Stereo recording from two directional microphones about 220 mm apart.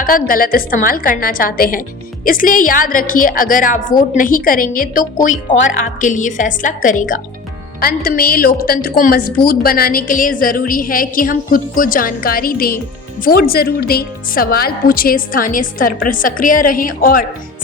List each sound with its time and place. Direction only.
0.0 s a woman's voice: 40° left (ahead or behind)